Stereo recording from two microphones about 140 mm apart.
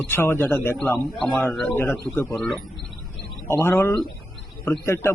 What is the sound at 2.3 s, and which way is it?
Speech, centre (ahead or behind).